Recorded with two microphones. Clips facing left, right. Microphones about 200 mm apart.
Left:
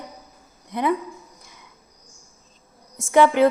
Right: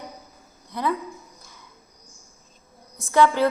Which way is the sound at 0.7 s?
20° left (ahead or behind).